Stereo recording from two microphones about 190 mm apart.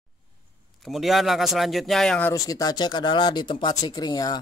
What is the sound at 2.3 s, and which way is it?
Speech, 20° left (ahead or behind).